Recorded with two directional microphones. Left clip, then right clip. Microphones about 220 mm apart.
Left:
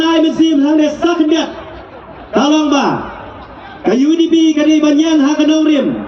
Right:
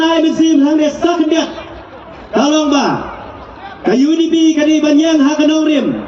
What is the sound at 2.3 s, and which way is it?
A man's voice, 40° left (ahead or behind).